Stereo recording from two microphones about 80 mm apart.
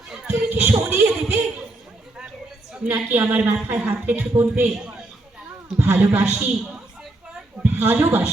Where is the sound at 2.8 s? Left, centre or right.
Right.